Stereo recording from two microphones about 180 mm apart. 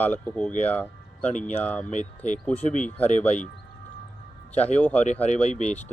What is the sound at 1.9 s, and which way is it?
Speech, 40° left (ahead or behind).